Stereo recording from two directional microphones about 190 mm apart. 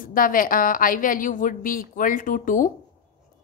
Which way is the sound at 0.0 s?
45° left (ahead or behind).